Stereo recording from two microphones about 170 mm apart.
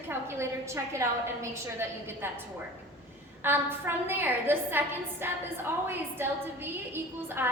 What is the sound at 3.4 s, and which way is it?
A woman's voice, 15° right (ahead or behind).